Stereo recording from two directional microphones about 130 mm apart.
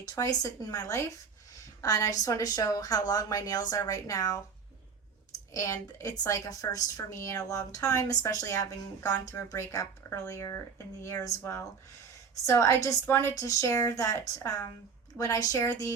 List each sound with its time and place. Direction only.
0.0 s a woman's voice: 25° left (ahead or behind)
5.5 s a woman's voice: 25° left (ahead or behind)
12.5 s a woman's voice: 25° left (ahead or behind)